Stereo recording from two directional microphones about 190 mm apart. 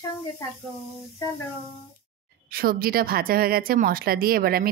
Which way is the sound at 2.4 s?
50° right (ahead or behind).